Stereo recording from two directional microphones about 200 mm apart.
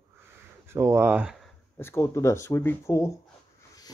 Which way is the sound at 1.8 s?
10° left (ahead or behind).